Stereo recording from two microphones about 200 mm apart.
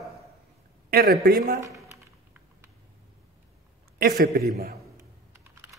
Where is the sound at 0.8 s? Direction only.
45° right (ahead or behind).